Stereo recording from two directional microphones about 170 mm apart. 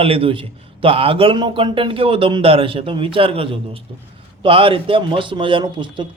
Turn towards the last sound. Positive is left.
turn(degrees=-30)  # may be behind; listen again after turning